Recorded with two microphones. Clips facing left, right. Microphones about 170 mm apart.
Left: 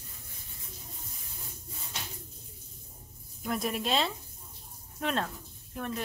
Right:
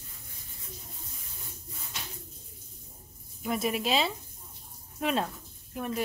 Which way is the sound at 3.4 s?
Centre (ahead or behind).